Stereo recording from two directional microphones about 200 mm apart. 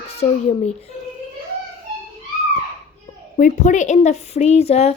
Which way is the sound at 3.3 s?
40° left (ahead or behind).